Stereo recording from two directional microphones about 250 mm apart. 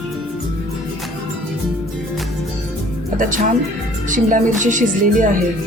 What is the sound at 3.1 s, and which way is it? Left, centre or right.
Speech, right.